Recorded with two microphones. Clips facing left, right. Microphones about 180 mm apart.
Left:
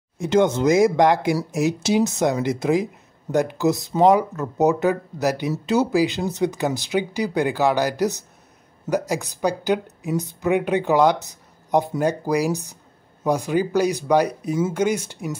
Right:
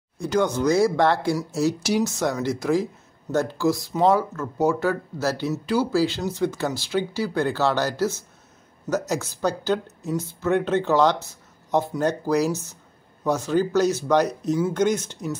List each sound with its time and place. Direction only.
0.2 s speech: 25° left (ahead or behind)